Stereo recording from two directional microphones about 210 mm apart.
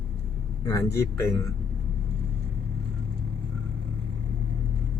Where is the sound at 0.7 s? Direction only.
15° left (ahead or behind).